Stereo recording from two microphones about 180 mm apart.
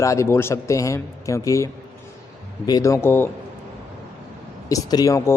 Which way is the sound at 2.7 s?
15° left (ahead or behind).